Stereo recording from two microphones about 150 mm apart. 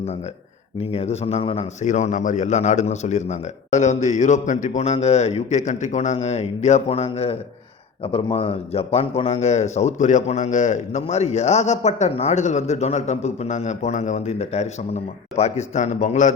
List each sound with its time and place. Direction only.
0.8 s a man's voice: 40° left (ahead or behind)